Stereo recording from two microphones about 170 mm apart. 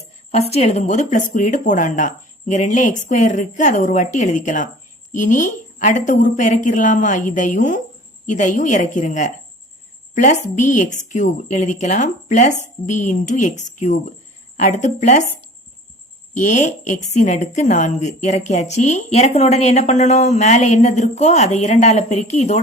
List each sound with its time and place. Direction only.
0.3 s a woman's voice: 40° left (ahead or behind)
16.4 s a woman's voice: 45° left (ahead or behind)